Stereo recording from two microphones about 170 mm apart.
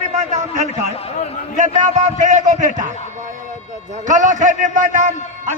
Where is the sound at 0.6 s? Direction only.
35° left (ahead or behind).